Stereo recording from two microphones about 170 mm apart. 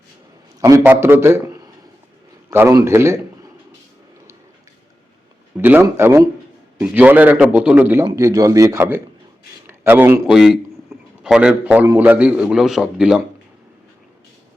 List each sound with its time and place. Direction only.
0.6 s a man's voice: 20° right (ahead or behind)
5.5 s a man's voice: 10° right (ahead or behind)
10.3 s a man's voice: centre (ahead or behind)